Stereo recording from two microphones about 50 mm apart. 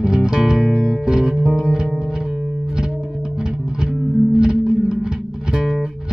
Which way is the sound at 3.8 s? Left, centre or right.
Centre.